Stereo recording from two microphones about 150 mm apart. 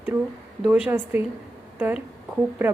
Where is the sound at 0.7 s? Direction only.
10° right (ahead or behind).